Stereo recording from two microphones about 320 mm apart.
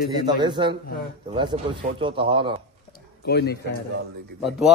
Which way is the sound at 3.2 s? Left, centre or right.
Left.